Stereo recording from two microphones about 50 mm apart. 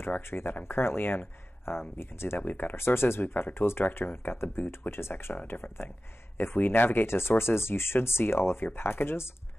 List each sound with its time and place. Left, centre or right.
0.0 s speech: left
2.4 s speech: left
2.7 s speech: left